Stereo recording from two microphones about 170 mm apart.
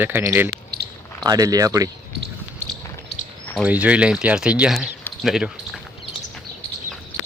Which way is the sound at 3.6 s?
10° right (ahead or behind).